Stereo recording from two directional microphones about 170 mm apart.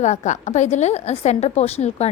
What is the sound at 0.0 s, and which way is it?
A woman's voice, 45° left (ahead or behind).